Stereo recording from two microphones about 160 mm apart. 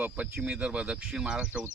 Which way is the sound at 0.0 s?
5° right (ahead or behind).